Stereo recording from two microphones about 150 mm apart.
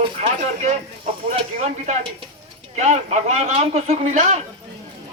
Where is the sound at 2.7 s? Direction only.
50° right (ahead or behind).